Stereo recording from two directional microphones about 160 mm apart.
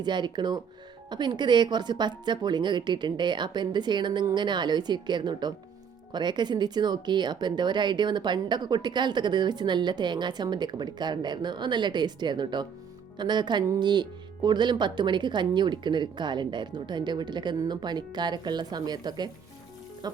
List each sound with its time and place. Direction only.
0.0 s speech: 30° right (ahead or behind)